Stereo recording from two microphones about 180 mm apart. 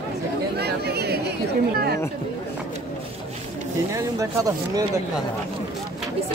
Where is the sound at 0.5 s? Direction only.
65° right (ahead or behind).